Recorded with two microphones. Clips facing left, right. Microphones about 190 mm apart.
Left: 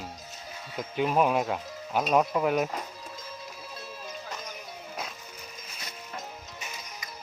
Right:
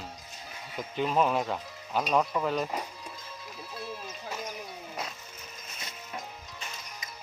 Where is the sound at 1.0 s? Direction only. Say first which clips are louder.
Left 2 dB; 10° left (ahead or behind).